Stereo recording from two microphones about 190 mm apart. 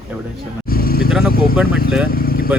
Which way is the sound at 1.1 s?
Centre (ahead or behind).